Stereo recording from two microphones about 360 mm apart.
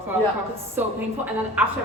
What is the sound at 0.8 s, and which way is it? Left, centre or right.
Speech, centre.